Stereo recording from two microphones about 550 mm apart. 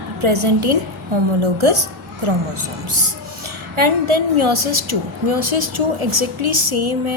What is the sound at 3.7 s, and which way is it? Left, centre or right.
Speech, right.